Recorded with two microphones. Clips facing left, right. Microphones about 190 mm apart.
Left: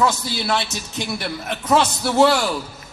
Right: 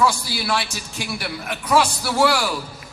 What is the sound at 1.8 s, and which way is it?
Speech, 25° left (ahead or behind).